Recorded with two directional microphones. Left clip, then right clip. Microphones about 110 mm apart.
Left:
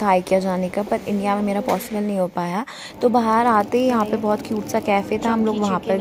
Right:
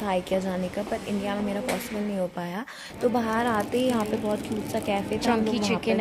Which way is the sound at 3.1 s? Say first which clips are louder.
Left 11 dB; 40° left (ahead or behind).